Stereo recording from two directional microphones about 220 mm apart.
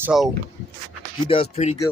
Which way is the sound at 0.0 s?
Centre (ahead or behind).